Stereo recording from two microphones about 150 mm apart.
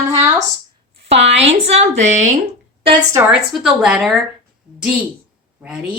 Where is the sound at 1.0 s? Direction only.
45° right (ahead or behind).